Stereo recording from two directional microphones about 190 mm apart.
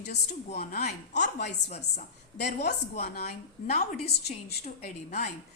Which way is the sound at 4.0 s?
35° left (ahead or behind).